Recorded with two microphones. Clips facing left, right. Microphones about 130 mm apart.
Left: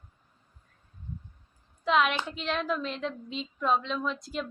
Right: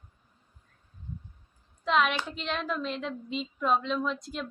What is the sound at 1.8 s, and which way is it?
A woman's voice, centre (ahead or behind).